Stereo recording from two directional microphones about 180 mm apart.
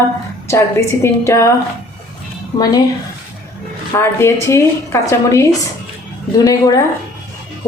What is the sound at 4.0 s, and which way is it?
Speech, 15° left (ahead or behind).